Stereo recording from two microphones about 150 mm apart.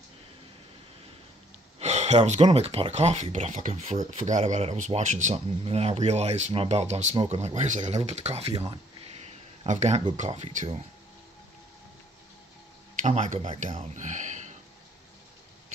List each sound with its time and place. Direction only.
1.8 s speech: 50° right (ahead or behind)
13.0 s speech: 50° right (ahead or behind)